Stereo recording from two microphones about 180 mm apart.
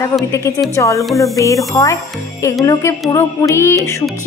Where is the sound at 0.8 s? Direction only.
15° left (ahead or behind).